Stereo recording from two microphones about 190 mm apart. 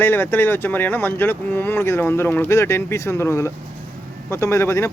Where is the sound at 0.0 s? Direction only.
10° left (ahead or behind).